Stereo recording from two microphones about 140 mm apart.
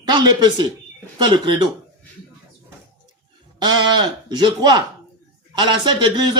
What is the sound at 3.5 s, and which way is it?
Speech, 30° right (ahead or behind).